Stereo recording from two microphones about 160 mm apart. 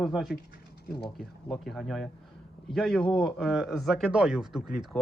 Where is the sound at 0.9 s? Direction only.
80° left.